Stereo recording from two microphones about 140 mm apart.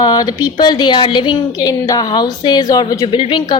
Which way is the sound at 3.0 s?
35° left (ahead or behind).